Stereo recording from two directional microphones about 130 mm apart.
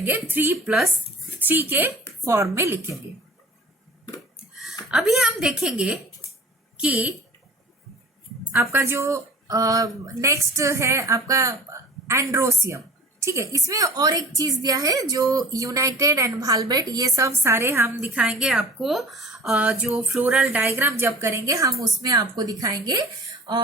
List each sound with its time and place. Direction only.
0.0 s a woman's voice: 15° right (ahead or behind)
4.9 s a woman's voice: 5° right (ahead or behind)
8.5 s speech: 20° right (ahead or behind)